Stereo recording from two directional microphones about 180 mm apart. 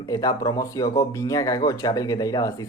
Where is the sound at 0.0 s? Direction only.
20° left (ahead or behind).